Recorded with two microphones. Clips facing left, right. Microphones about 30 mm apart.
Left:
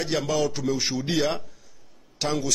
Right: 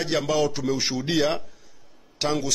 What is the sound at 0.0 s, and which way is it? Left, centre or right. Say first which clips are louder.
A man's voice: right 2 dB; centre.